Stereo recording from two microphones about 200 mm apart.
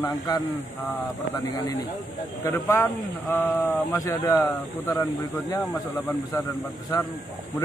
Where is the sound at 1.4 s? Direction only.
15° left (ahead or behind).